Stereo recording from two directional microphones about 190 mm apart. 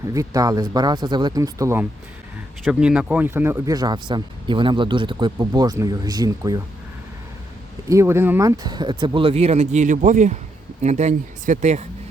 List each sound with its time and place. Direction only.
0.1 s speech: 20° right (ahead or behind)
7.9 s speech: 15° right (ahead or behind); by 11.9 s 35° right (ahead or behind)